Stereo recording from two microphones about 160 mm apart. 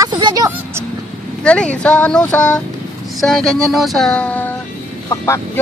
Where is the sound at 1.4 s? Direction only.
5° left (ahead or behind).